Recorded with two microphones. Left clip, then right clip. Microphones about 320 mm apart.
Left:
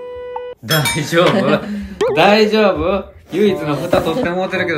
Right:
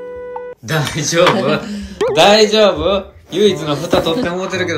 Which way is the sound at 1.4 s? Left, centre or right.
Centre.